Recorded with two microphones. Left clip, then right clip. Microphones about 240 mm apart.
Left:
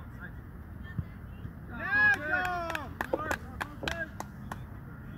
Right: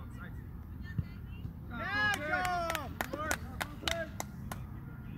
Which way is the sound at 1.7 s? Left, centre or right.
Right.